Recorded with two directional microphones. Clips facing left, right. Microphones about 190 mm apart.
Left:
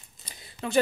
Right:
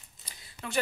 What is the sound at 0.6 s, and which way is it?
Speech, 30° left (ahead or behind).